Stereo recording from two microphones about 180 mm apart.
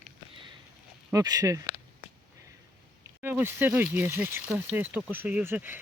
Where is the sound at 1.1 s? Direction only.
20° right (ahead or behind).